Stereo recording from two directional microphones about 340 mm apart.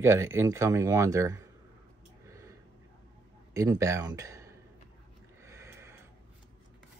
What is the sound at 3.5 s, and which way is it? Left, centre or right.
Speech, centre.